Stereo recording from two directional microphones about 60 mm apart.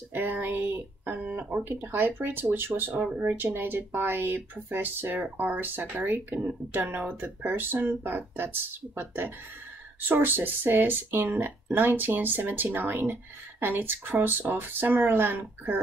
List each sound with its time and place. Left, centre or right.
0.1 s speech: right